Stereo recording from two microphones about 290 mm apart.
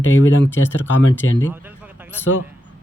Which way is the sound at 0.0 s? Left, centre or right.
Left.